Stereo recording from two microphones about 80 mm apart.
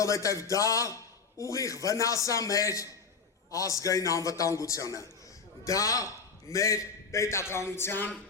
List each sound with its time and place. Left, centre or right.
0.0 s a man's voice: left